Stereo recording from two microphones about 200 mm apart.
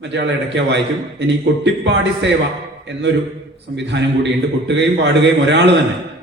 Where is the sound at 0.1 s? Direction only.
60° right (ahead or behind).